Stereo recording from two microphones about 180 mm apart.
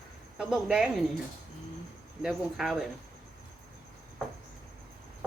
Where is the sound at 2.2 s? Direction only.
Centre (ahead or behind).